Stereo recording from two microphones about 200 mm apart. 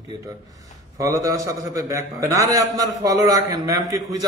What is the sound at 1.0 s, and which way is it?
A man's voice, 15° right (ahead or behind).